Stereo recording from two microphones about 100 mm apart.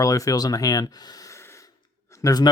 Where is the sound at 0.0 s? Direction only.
35° left (ahead or behind).